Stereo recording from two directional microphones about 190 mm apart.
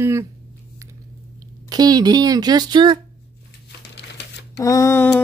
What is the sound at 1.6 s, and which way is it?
Speech, 20° right (ahead or behind).